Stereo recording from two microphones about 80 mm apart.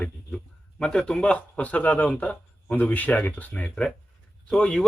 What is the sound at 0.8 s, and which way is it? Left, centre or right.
A man's voice, centre.